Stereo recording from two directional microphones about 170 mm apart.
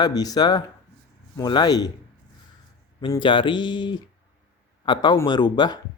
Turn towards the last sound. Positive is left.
turn(degrees=25)  # may be behind; listen again after turning